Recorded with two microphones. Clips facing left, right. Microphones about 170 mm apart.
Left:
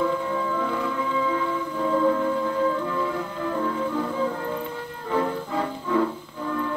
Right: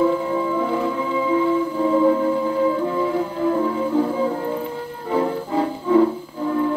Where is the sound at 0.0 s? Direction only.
25° right (ahead or behind).